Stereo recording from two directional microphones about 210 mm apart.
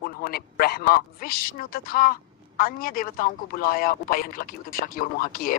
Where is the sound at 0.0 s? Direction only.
45° left (ahead or behind).